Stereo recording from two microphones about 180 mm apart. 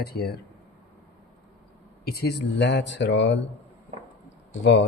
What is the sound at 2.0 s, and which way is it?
Speech, 65° left (ahead or behind).